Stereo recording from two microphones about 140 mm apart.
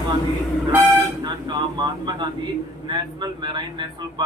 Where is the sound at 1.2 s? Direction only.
35° right (ahead or behind).